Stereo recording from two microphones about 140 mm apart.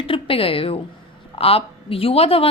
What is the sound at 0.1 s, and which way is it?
A woman's voice, 40° left (ahead or behind).